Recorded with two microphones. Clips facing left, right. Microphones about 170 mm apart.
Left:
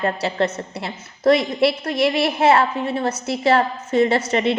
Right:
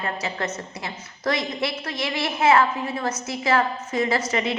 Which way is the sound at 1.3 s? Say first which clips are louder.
Left 9 dB; 60° left (ahead or behind).